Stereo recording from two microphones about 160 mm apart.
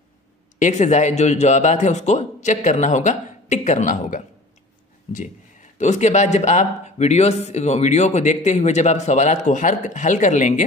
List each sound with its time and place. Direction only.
0.6 s speech: 50° left (ahead or behind)